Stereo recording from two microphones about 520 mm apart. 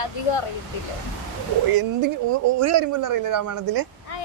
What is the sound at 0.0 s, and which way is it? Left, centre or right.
Speech, left.